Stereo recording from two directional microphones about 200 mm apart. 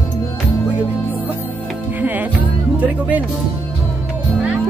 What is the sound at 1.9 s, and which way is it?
Music, 10° right (ahead or behind).